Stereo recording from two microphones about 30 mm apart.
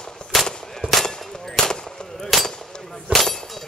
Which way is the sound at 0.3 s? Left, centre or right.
Centre.